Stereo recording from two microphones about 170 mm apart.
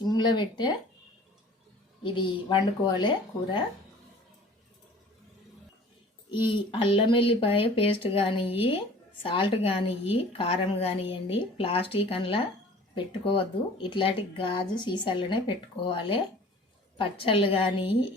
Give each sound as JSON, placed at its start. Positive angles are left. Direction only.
{"t": 0.0, "sound": "speech", "side_deg": 25}
{"t": 2.1, "sound": "speech", "side_deg": 25}
{"t": 6.3, "sound": "a woman's voice", "side_deg": 30}